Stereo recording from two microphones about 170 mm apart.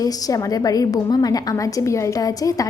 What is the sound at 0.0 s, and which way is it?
A woman's voice, 20° left (ahead or behind).